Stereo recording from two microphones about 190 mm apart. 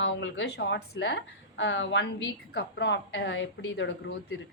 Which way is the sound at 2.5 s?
60° left (ahead or behind).